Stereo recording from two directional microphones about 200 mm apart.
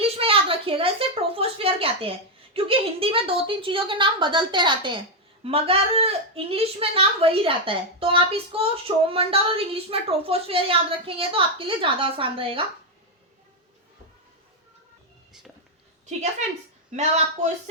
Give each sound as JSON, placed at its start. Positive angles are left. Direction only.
{"t": 0.0, "sound": "a woman's voice", "side_deg": -30}
{"t": 16.9, "sound": "speech", "side_deg": -35}